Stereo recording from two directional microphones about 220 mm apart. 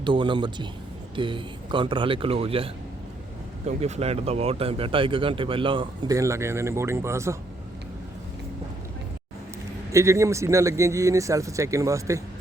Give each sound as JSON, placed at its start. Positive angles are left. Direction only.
{"t": 0.0, "sound": "speech", "side_deg": -20}
{"t": 3.7, "sound": "speech", "side_deg": -30}
{"t": 9.9, "sound": "speech", "side_deg": -15}